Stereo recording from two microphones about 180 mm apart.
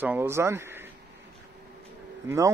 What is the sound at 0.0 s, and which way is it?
Speech, 10° right (ahead or behind).